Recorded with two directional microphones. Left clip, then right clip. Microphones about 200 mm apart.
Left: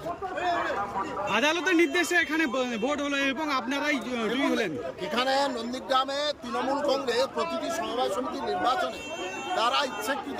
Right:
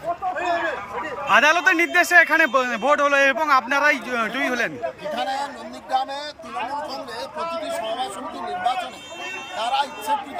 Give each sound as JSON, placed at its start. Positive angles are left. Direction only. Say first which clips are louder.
{"t": 1.3, "sound": "a man's voice", "louder": "right 9 dB", "side_deg": 5}
{"t": 5.1, "sound": "a man's voice", "louder": "left 3 dB", "side_deg": 30}
{"t": 9.6, "sound": "a man's voice", "louder": "right 3 dB", "side_deg": 0}